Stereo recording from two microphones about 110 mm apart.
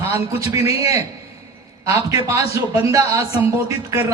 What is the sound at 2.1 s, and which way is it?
A man's voice, 30° right (ahead or behind).